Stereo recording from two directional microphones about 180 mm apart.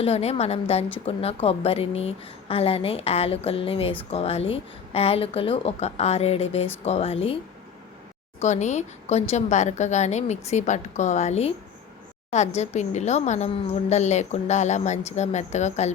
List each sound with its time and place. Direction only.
0.0 s speech: 35° left (ahead or behind)
8.4 s speech: 40° left (ahead or behind)
12.5 s speech: 40° left (ahead or behind)